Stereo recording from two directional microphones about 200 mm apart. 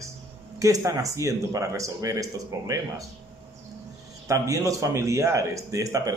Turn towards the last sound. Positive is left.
turn(degrees=-15)  # may be behind; listen again after turning